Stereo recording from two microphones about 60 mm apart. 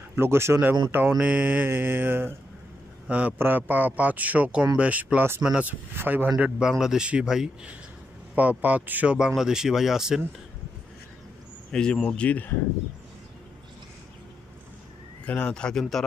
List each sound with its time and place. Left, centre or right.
0.1 s speech: right
0.6 s speech: right
1.2 s a man's voice: right
1.7 s speech: right
3.1 s a man's voice: right
3.3 s a man's voice: right
6.8 s speech: centre
8.4 s a man's voice: right
9.4 s speech: centre
11.7 s speech: centre
12.1 s speech: left
15.2 s speech: centre